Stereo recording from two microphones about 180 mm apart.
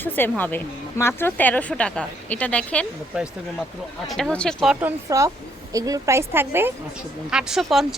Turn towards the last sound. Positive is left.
turn(degrees=0)  # may be behind; listen again after turning